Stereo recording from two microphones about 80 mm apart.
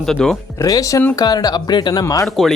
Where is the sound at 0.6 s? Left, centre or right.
Left.